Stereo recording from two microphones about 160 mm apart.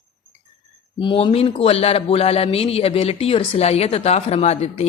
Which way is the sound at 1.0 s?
30° left (ahead or behind).